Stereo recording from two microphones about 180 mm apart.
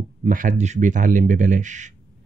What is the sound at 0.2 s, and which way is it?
Speech, 45° right (ahead or behind).